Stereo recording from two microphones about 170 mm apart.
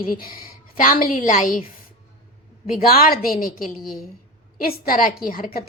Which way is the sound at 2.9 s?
60° left (ahead or behind).